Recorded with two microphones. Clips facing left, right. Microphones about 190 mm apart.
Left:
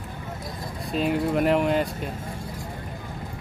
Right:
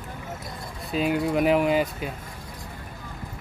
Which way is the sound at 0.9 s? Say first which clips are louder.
Even; centre (ahead or behind).